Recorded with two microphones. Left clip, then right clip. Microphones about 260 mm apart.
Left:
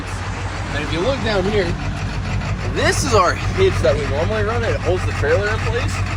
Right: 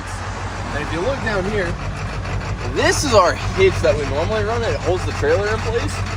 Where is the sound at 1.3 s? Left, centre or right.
Centre.